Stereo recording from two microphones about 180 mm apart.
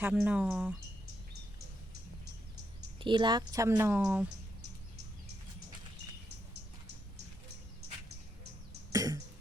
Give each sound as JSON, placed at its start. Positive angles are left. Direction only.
{"t": 0.0, "sound": "speech", "side_deg": -5}
{"t": 3.0, "sound": "speech", "side_deg": -25}
{"t": 8.9, "sound": "throat clearing", "side_deg": -20}